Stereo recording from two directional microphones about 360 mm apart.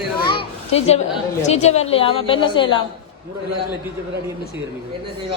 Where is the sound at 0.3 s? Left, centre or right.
Centre.